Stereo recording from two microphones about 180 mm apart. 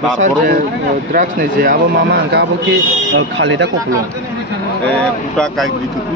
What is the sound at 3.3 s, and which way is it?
Speech, 90° right.